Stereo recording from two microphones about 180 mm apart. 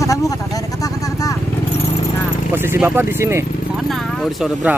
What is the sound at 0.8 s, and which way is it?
Vehicle, 20° left (ahead or behind).